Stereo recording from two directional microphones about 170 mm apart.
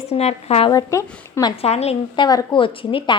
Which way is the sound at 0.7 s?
20° left (ahead or behind).